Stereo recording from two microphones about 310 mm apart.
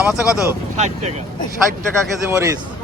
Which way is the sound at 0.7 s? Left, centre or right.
Right.